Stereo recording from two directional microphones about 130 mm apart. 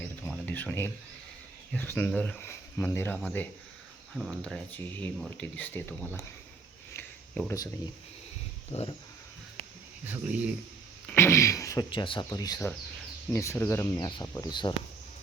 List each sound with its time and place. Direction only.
0.0 s a sound: 10° left (ahead or behind)
1.7 s speech: 15° left (ahead or behind)
2.5 s speech: 20° left (ahead or behind)
4.1 s speech: centre (ahead or behind); by 6.2 s 15° left (ahead or behind)
6.9 s a sound: 15° left (ahead or behind)
8.7 s speech: 50° left (ahead or behind)
10.1 s speech: 10° right (ahead or behind)
11.1 s speech: 20° left (ahead or behind)
11.9 s speech: 40° left (ahead or behind)
12.4 s speech: 25° left (ahead or behind)